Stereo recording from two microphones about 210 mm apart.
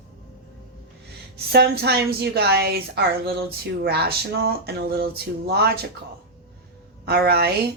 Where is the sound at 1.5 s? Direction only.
50° right (ahead or behind).